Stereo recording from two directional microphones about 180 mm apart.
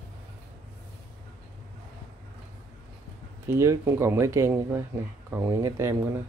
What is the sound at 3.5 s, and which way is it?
Speech, 15° right (ahead or behind).